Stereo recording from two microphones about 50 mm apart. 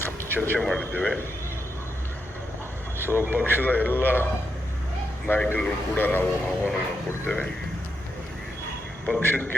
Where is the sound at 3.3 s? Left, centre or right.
Left.